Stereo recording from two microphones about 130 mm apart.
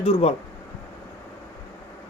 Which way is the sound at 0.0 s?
50° left (ahead or behind).